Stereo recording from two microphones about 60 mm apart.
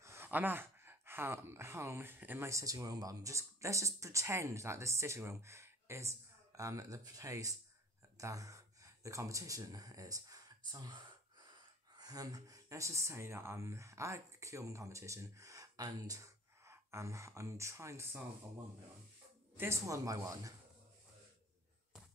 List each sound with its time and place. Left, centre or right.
0.0 s a sound: right
0.3 s speech: right
2.1 s speech: right
2.4 s speech: right
16.6 s speech: right
19.5 s speech: right
19.9 s speech: right